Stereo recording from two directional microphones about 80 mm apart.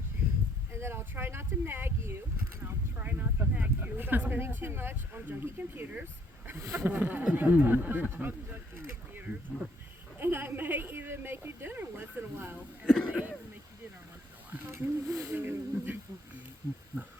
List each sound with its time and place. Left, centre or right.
0.7 s a sound: right
2.6 s speech: right
6.6 s speech: right
6.8 s a woman's voice: right
12.8 s speech: centre
13.1 s speech: centre
14.7 s speech: right
15.3 s speech: right